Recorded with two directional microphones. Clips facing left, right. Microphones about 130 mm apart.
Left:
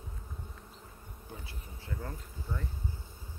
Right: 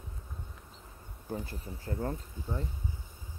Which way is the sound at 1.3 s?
45° right (ahead or behind).